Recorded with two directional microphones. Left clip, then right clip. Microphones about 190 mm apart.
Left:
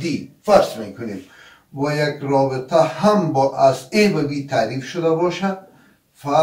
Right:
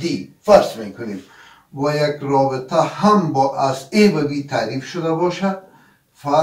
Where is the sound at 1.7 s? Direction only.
10° left (ahead or behind).